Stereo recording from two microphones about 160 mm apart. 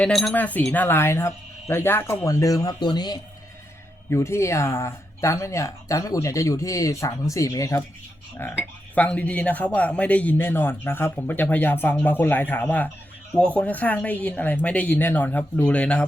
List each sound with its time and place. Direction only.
0.0 s a man's voice: centre (ahead or behind)